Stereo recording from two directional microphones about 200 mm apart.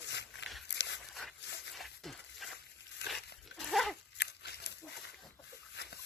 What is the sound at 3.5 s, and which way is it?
Dog, centre (ahead or behind).